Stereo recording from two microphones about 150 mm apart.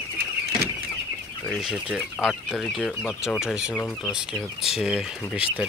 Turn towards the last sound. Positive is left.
turn(degrees=-5)  # may be behind; listen again after turning